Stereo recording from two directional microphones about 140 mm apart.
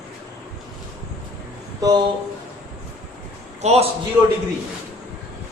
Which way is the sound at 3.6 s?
50° right (ahead or behind).